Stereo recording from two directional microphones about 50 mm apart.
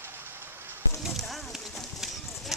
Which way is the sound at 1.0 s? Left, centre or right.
Centre.